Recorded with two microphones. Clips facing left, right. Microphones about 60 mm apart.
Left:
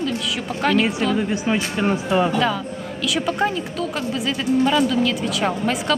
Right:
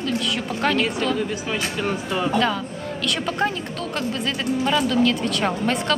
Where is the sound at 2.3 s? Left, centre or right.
Centre.